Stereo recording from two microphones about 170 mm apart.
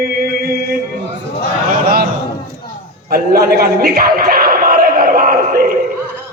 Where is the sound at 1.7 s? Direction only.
60° right (ahead or behind).